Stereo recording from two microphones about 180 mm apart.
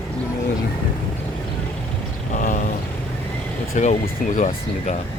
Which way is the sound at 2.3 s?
45° left (ahead or behind).